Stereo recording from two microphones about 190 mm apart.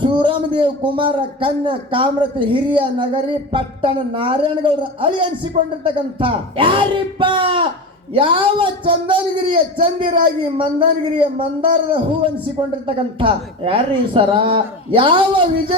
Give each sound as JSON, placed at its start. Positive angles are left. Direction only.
{"t": 0.0, "sound": "a man's voice", "side_deg": -25}